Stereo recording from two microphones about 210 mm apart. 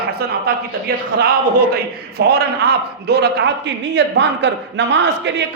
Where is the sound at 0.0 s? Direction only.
45° right (ahead or behind).